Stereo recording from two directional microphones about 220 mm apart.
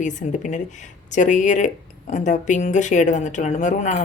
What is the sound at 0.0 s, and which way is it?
Speech, 35° left (ahead or behind).